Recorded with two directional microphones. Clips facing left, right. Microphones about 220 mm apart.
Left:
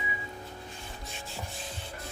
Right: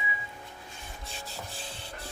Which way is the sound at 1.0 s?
35° right (ahead or behind).